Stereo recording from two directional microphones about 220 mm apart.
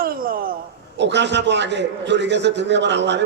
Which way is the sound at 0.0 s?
40° right (ahead or behind).